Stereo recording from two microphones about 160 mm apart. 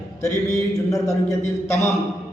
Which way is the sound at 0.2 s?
20° left (ahead or behind).